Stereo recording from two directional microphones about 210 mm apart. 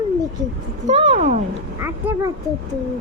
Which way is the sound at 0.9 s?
30° right (ahead or behind).